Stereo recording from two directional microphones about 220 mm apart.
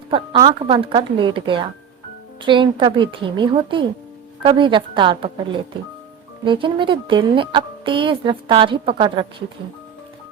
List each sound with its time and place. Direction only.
0.1 s a woman's voice: 25° right (ahead or behind)